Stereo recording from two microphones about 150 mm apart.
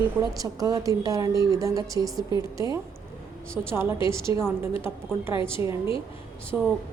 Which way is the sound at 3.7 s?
15° right (ahead or behind).